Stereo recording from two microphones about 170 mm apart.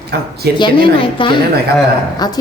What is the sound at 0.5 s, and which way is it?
A woman's voice, 30° left (ahead or behind).